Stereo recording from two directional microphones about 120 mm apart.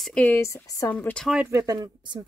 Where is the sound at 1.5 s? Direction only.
30° right (ahead or behind).